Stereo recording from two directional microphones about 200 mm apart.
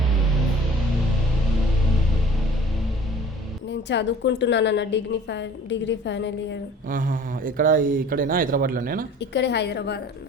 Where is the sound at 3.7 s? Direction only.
60° left (ahead or behind).